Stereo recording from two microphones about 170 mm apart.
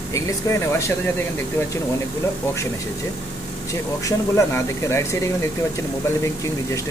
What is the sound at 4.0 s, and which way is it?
Speech, 15° left (ahead or behind).